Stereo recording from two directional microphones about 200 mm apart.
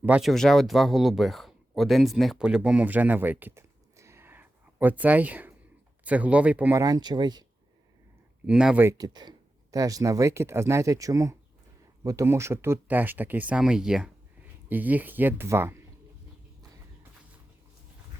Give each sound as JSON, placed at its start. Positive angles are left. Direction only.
{"t": 0.0, "sound": "speech", "side_deg": -5}
{"t": 8.4, "sound": "speech", "side_deg": -5}